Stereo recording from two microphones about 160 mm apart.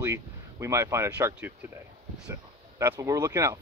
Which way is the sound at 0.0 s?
15° right (ahead or behind).